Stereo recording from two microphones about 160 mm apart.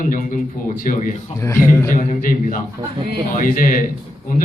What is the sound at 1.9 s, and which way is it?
Speech, 55° left (ahead or behind).